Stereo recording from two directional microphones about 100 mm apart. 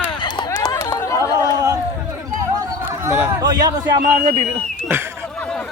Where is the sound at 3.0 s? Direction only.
25° right (ahead or behind).